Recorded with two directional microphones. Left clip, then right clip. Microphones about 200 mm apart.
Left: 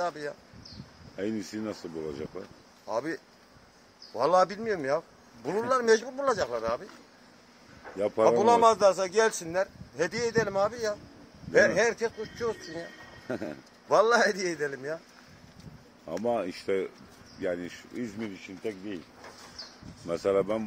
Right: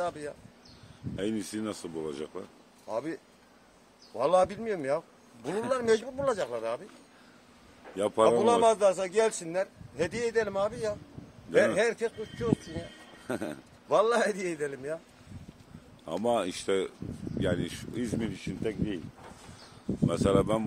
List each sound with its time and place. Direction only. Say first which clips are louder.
0.0 s speech: left 2 dB; centre (ahead or behind)
1.1 s speech: even; 10° right (ahead or behind)
1.7 s speech: even; 25° right (ahead or behind)
2.9 s a man's voice: left 2 dB; 10° left (ahead or behind)
8.3 s a man's voice: left 4 dB; centre (ahead or behind)
13.8 s a man's voice: left 3 dB; centre (ahead or behind)
16.1 s speech: right 1 dB; 15° right (ahead or behind)
20.1 s speech: even; 10° right (ahead or behind)